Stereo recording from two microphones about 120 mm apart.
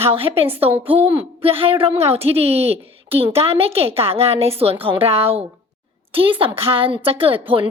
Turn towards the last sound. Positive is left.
turn(degrees=-50)  # may be behind; listen again after turning